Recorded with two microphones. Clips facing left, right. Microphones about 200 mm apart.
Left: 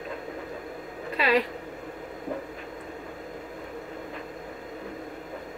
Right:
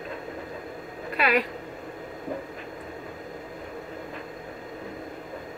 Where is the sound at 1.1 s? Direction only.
25° left (ahead or behind).